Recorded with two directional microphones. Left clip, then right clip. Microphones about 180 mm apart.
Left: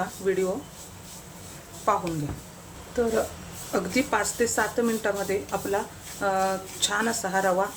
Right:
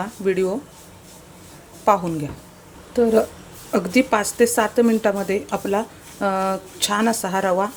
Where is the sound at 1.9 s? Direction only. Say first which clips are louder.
Right 7 dB; 50° right (ahead or behind).